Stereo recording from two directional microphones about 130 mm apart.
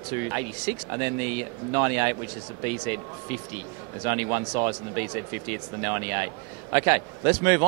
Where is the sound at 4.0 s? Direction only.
25° right (ahead or behind).